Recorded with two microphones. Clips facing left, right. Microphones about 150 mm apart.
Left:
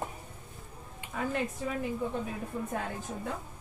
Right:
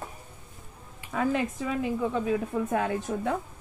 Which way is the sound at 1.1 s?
85° right.